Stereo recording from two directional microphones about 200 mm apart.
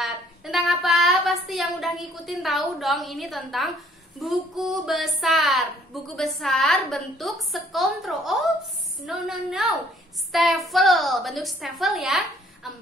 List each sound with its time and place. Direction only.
0.0 s child singing: centre (ahead or behind)
4.2 s a woman's voice: centre (ahead or behind)